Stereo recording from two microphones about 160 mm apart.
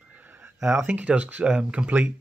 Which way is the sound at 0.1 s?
10° right (ahead or behind).